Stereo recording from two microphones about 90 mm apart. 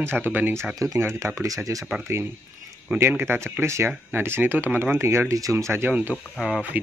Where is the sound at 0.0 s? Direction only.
25° right (ahead or behind).